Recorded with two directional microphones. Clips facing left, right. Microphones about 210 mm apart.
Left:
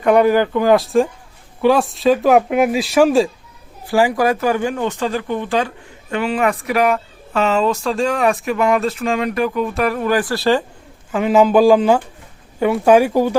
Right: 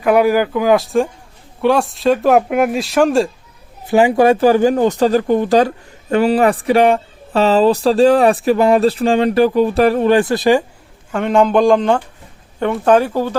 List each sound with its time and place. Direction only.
0.0 s speech: 5° right (ahead or behind)
3.8 s speech: 20° right (ahead or behind)
11.1 s speech: 5° left (ahead or behind)